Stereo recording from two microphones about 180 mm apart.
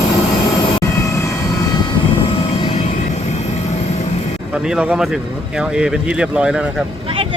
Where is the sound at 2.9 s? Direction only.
40° left (ahead or behind).